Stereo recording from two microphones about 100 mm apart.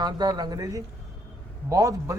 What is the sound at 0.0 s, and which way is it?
A man's voice, 40° right (ahead or behind).